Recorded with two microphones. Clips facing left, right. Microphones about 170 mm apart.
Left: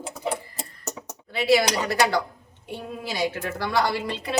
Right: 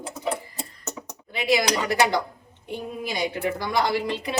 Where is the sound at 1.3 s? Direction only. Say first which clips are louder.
Left 2 dB; 15° right (ahead or behind).